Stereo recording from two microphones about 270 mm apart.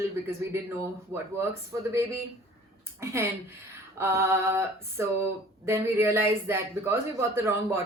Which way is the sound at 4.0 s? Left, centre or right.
Centre.